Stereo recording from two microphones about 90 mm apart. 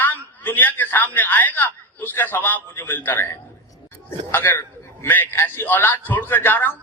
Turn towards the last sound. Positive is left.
turn(degrees=20)  # may be behind; listen again after turning